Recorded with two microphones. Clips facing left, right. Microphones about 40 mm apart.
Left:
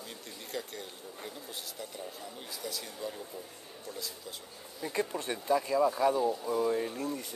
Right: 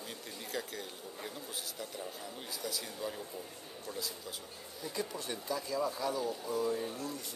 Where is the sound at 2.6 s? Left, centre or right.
Centre.